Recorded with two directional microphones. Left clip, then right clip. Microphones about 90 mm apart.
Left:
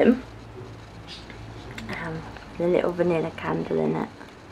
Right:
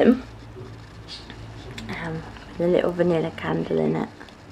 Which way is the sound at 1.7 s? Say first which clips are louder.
Right 1 dB; 25° right (ahead or behind).